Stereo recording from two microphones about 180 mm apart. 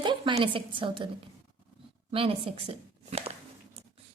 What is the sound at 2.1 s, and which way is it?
Speech, 30° right (ahead or behind).